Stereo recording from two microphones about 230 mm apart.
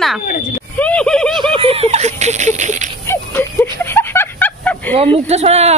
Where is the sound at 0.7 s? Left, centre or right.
Centre.